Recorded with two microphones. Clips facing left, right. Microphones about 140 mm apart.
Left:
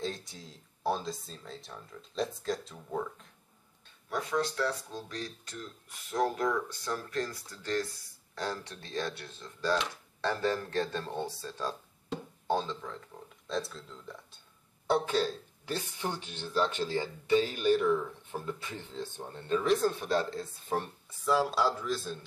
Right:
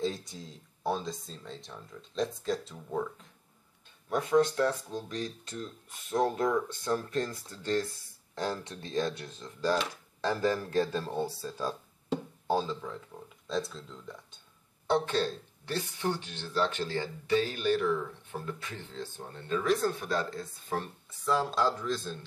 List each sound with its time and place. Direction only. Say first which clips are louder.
0.0 s speech: right 4 dB; centre (ahead or behind)
4.1 s speech: right 6 dB; 25° right (ahead or behind); by 20.8 s 25° left (ahead or behind)
21.3 s speech: even; 5° left (ahead or behind)